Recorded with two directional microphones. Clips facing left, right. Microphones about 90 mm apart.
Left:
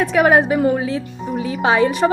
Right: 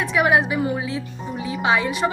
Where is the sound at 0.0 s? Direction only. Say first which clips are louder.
Left 5 dB; 45° left (ahead or behind).